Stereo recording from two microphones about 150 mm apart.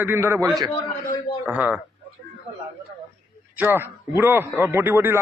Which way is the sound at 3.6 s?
15° right (ahead or behind).